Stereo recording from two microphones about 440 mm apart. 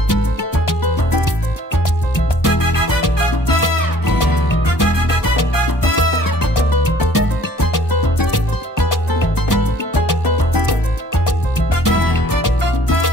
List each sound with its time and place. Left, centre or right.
0.1 s music: left
2.4 s music: left
5.9 s music: left
9.5 s music: left
11.8 s music: left